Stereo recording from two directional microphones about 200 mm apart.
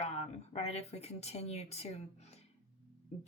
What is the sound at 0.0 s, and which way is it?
Speech, 35° left (ahead or behind).